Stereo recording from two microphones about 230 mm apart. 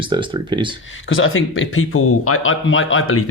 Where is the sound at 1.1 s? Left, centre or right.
Left.